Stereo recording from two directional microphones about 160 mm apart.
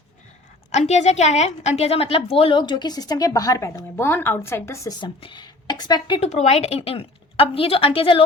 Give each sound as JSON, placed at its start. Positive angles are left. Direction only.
{"t": 0.7, "sound": "a woman's voice", "side_deg": 45}
{"t": 6.1, "sound": "a woman's voice", "side_deg": 45}